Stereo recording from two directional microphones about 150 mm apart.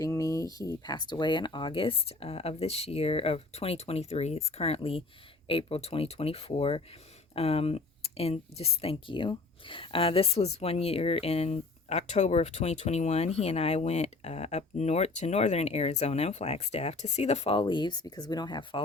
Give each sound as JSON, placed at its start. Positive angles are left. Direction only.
{"t": 0.0, "sound": "speech", "side_deg": 20}